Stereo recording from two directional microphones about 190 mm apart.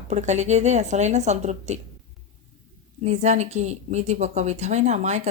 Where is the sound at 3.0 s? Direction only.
35° right (ahead or behind).